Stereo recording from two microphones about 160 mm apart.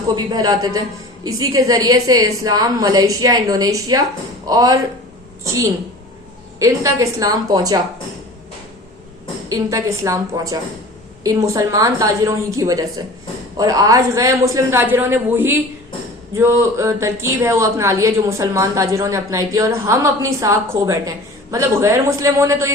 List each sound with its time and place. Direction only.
0.3 s a woman's voice: 25° right (ahead or behind)
6.6 s a woman's voice: 20° right (ahead or behind)
9.5 s a woman's voice: 20° right (ahead or behind)